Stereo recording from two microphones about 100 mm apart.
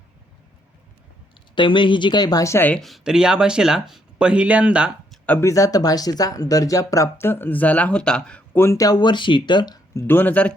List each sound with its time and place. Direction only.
1.5 s speech: 55° left (ahead or behind)
2.4 s a woman's voice: 30° left (ahead or behind)
2.8 s speech: 5° right (ahead or behind)
5.4 s speech: 30° left (ahead or behind); by 8.4 s 10° left (ahead or behind)
8.5 s speech: 30° left (ahead or behind)
9.0 s speech: 50° left (ahead or behind)
10.1 s speech: 15° left (ahead or behind)